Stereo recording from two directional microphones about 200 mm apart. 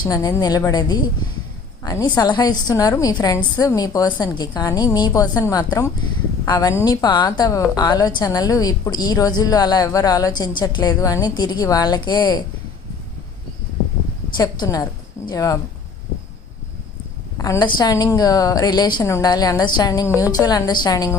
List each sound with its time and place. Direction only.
0.0 s a woman's voice: 20° left (ahead or behind)
14.3 s a woman's voice: 20° left (ahead or behind)
17.3 s a woman's voice: 15° left (ahead or behind)